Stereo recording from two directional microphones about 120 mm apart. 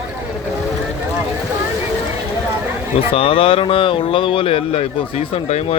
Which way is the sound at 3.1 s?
50° left (ahead or behind).